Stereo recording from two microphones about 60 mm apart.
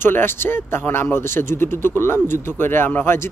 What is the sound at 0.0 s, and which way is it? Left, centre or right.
Speech, left.